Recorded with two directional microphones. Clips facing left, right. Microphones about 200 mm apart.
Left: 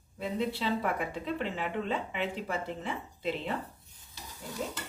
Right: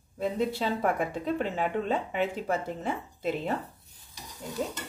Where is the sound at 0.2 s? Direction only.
45° right (ahead or behind).